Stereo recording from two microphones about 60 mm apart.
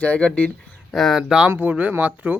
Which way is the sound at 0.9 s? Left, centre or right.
Centre.